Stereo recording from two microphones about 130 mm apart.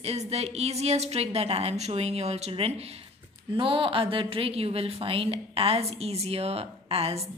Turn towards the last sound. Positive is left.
turn(degrees=-50)  # may be behind; listen again after turning